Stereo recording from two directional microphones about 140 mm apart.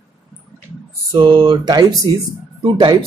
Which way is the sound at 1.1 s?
35° right (ahead or behind).